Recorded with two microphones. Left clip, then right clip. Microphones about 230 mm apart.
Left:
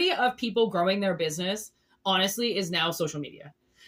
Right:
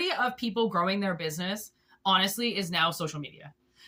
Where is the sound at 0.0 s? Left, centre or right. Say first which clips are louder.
Left 4 dB; centre.